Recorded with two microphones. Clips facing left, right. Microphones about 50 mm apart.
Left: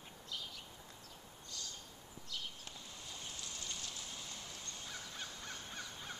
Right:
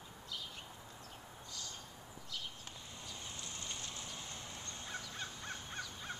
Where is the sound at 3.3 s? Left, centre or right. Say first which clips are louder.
Even; right.